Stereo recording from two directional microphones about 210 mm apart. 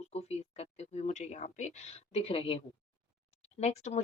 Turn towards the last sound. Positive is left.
turn(degrees=30)  # may be behind; listen again after turning